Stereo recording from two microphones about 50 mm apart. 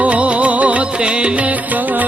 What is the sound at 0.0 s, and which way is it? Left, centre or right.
Music, right.